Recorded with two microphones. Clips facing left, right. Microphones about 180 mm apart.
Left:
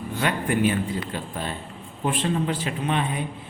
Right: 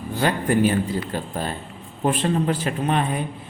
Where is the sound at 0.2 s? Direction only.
35° right (ahead or behind).